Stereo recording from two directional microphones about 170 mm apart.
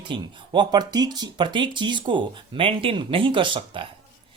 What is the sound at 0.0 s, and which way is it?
Speech, 25° right (ahead or behind).